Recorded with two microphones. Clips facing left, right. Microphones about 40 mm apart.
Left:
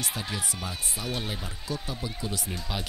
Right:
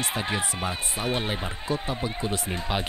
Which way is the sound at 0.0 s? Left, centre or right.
Right.